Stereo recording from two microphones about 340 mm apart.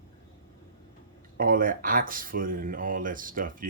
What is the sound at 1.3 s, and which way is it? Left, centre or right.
Speech, right.